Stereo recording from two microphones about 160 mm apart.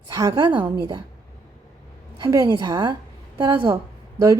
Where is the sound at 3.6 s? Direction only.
15° right (ahead or behind).